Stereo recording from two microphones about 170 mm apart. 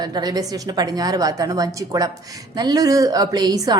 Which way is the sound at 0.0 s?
25° right (ahead or behind).